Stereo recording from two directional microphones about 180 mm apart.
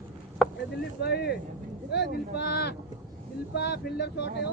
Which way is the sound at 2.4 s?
65° left (ahead or behind).